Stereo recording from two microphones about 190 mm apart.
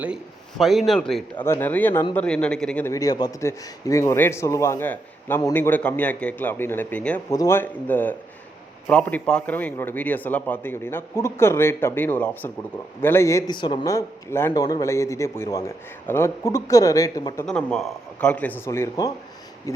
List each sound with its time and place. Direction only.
0.6 s a man's voice: centre (ahead or behind); by 17.4 s 20° left (ahead or behind)
17.4 s a man's voice: 5° left (ahead or behind)